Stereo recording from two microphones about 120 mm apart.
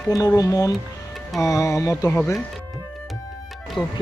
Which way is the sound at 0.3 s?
30° left (ahead or behind).